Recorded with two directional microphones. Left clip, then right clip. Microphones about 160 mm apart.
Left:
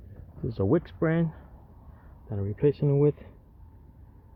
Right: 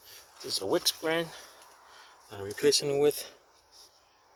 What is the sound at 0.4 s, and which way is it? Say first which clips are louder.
Speech: left 1 dB; 10° right (ahead or behind).